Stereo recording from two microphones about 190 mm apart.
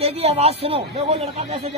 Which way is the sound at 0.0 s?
30° right (ahead or behind).